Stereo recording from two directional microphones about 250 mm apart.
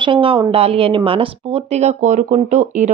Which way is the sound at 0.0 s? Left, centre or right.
Centre.